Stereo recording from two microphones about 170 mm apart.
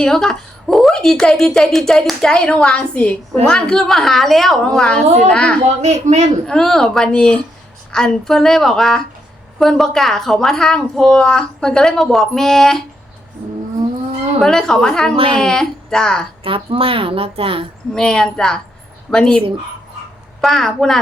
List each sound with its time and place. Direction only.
0.0 s a woman's voice: 5° left (ahead or behind)
5.6 s a woman's voice: 40° right (ahead or behind)
6.5 s a woman's voice: 5° left (ahead or behind)
14.4 s a woman's voice: 5° left (ahead or behind)
15.1 s a woman's voice: 30° right (ahead or behind)
15.4 s a woman's voice: 5° left (ahead or behind)
16.4 s a woman's voice: 35° right (ahead or behind)
17.9 s a woman's voice: 5° left (ahead or behind)
20.4 s a woman's voice: centre (ahead or behind)